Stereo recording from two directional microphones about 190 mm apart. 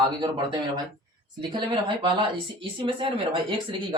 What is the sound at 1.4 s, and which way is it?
Speech, 25° right (ahead or behind).